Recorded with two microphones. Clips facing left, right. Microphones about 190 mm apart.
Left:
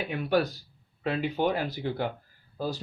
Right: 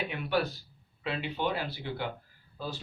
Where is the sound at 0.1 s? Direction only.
45° left (ahead or behind).